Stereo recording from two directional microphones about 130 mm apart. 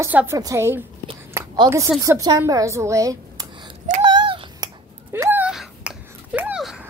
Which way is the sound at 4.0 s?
40° right (ahead or behind).